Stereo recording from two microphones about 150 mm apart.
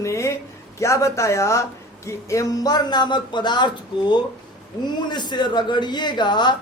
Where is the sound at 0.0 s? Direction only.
20° left (ahead or behind).